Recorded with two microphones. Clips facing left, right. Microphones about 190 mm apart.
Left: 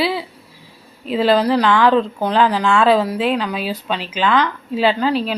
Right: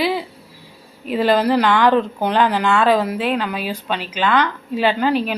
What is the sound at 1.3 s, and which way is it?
Speech, 10° right (ahead or behind).